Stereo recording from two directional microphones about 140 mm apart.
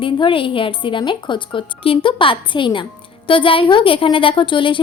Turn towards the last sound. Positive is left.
turn(degrees=35)  # may be behind; listen again after turning